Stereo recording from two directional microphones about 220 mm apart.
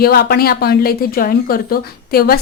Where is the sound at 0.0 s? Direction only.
45° left (ahead or behind).